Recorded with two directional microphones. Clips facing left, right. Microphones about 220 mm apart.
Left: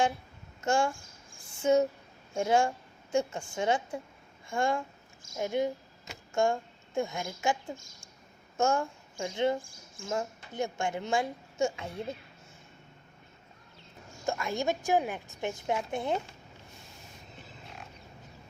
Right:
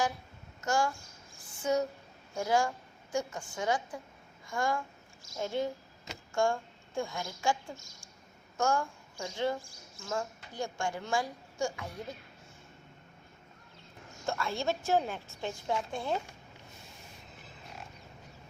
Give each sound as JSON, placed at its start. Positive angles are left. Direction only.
{"t": 0.6, "sound": "a woman's voice", "side_deg": 25}
{"t": 8.5, "sound": "a woman's voice", "side_deg": 25}
{"t": 14.3, "sound": "a woman's voice", "side_deg": 15}